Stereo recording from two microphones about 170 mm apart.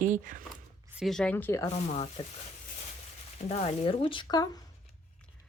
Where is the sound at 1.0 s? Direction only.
Centre (ahead or behind).